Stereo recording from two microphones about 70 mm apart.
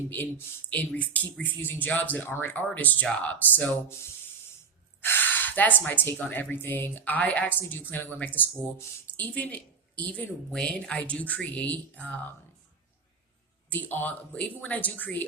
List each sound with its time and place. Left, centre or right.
0.1 s speech: left
5.0 s a woman's voice: left
13.7 s speech: left